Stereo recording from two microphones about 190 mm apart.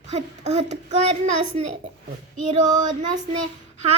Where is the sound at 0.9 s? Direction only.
40° right (ahead or behind).